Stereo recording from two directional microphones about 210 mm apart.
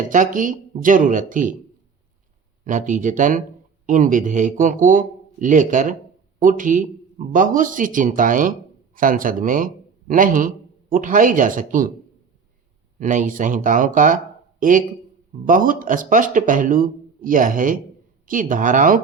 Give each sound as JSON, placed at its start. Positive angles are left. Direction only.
{"t": 0.1, "sound": "speech", "side_deg": -40}
{"t": 2.6, "sound": "speech", "side_deg": -40}
{"t": 13.0, "sound": "speech", "side_deg": -40}